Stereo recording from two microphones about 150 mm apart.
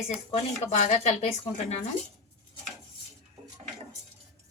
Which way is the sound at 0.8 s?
40° left (ahead or behind).